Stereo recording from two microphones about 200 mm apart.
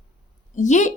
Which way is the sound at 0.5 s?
40° left (ahead or behind).